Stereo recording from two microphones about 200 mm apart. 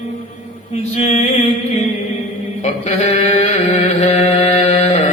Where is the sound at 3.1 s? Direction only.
35° left (ahead or behind).